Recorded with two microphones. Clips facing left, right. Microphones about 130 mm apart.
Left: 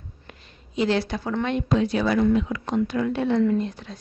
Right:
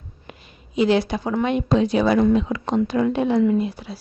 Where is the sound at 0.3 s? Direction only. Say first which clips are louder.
Right 5 dB; 15° right (ahead or behind).